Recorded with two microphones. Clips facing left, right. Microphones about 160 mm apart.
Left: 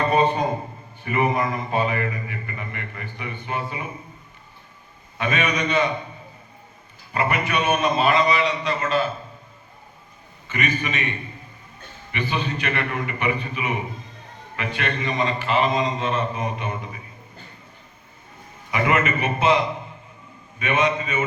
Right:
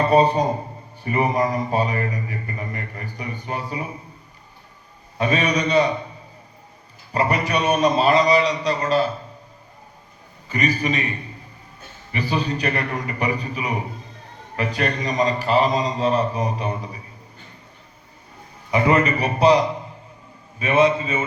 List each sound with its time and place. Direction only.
0.0 s a man's voice: 35° right (ahead or behind)
5.1 s speech: 35° right (ahead or behind)
7.1 s speech: 35° right (ahead or behind)
10.5 s speech: 35° right (ahead or behind)
12.1 s speech: 35° right (ahead or behind)
18.7 s speech: 35° right (ahead or behind)